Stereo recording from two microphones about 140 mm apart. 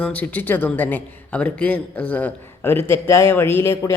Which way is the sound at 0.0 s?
10° left (ahead or behind).